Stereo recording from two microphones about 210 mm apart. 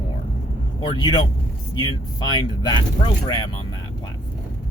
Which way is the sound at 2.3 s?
20° left (ahead or behind).